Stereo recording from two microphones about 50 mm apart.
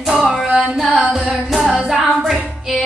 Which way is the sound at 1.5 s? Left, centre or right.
Centre.